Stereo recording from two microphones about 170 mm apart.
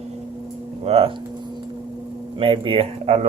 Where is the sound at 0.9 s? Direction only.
35° right (ahead or behind).